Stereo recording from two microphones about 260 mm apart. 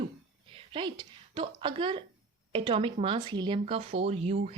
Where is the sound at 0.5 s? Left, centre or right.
Centre.